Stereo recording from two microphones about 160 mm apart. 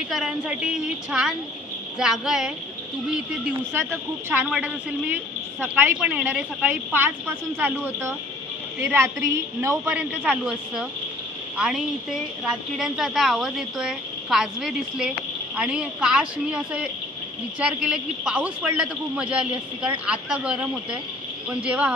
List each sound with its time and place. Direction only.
0.1 s a man's voice: 5° right (ahead or behind)
11.5 s a woman's voice: 5° right (ahead or behind)